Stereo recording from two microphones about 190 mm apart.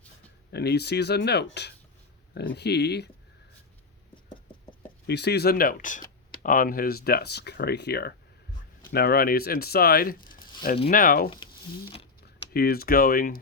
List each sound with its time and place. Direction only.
0.5 s speech: 60° left (ahead or behind)
5.0 s speech: 60° left (ahead or behind)
12.5 s speech: 55° left (ahead or behind)